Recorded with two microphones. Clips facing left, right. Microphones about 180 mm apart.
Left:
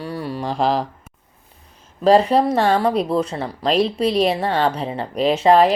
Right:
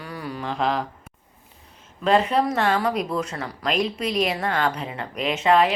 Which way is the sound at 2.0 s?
35° left (ahead or behind).